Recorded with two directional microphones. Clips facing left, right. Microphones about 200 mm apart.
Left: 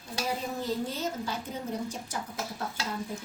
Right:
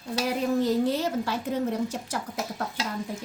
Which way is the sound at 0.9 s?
75° right (ahead or behind).